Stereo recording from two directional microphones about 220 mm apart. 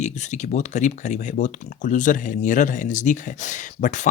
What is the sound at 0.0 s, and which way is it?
Speech, 30° left (ahead or behind).